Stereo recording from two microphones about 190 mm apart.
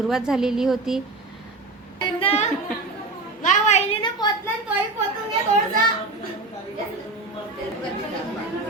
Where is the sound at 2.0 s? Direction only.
25° left (ahead or behind).